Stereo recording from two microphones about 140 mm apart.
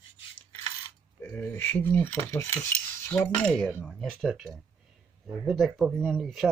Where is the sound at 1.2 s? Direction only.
15° left (ahead or behind).